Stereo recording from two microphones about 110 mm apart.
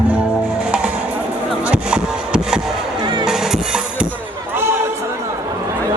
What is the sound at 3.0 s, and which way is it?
Music, 45° right (ahead or behind).